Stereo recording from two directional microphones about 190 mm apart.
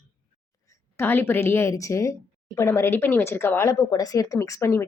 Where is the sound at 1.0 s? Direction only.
10° left (ahead or behind).